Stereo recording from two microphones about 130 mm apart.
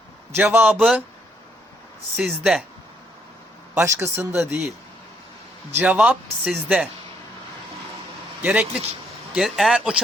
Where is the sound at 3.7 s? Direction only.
20° right (ahead or behind).